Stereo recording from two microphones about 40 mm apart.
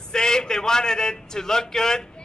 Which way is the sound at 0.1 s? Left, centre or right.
Centre.